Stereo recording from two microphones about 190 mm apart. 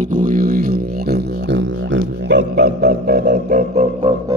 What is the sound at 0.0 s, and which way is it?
Music, 45° right (ahead or behind).